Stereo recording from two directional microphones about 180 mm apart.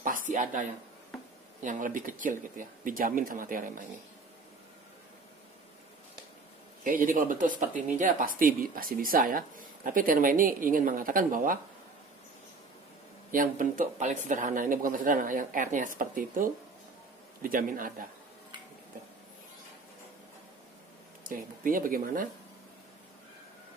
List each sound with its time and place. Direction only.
0.0 s a sound: 50° right (ahead or behind)
1.6 s speech: 45° right (ahead or behind)
6.8 s speech: 50° right (ahead or behind)
13.3 s speech: 50° right (ahead or behind)
21.3 s speech: 50° right (ahead or behind)